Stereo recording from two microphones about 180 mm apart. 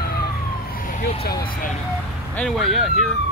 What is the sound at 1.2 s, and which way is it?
Speech, 55° left (ahead or behind).